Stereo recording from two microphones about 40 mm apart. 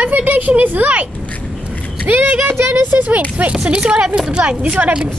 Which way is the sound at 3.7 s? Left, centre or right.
Right.